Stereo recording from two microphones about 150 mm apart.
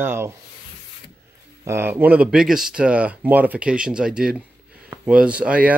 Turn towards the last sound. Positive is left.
turn(degrees=-10)  # may be behind; listen again after turning